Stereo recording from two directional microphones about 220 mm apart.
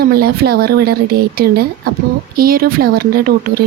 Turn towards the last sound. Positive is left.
turn(degrees=-45)  # may be behind; listen again after turning